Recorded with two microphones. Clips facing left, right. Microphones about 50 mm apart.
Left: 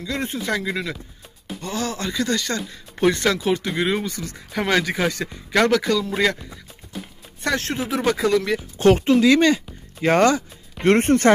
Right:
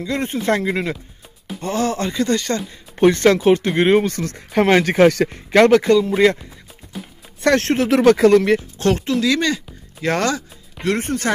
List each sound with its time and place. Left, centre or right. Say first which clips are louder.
0.0 s speech: right 5 dB; right
4.1 s speech: right 7 dB; right
4.5 s speech: right 6 dB; right
4.8 s speech: right 10 dB; right
5.5 s speech: right 6 dB; right
7.5 s speech: right 7 dB; right
7.8 s speech: right 9 dB; right
8.7 s speech: left 3 dB; centre
10.9 s speech: left 5 dB; left